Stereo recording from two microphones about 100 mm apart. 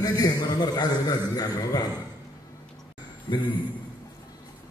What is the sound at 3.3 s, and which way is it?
Speech, 45° left (ahead or behind).